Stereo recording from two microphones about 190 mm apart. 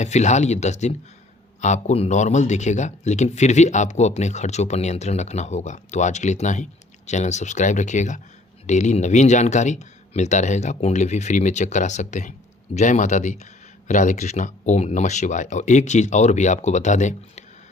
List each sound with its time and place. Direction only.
0.0 s speech: 35° left (ahead or behind)